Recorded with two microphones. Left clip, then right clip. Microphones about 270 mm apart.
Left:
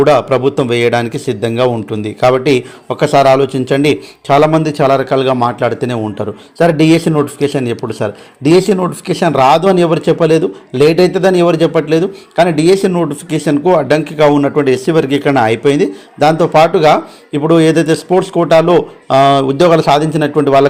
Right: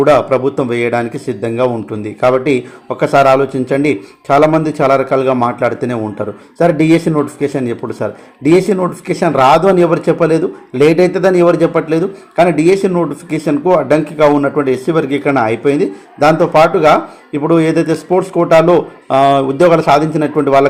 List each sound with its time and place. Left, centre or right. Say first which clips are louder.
0.0 s speech: even; left
1.1 s speech: left 2 dB; left
7.9 s speech: left 1 dB; left
8.5 s speech: left 1 dB; centre
10.3 s speech: left 2 dB; left
11.3 s speech: even; centre